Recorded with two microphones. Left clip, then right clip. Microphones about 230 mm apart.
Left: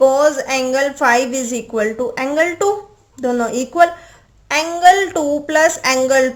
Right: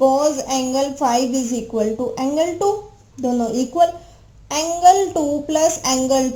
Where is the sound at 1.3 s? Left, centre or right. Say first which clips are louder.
Left 1 dB; left.